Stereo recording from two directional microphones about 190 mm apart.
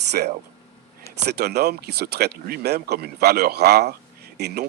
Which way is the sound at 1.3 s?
60° right (ahead or behind).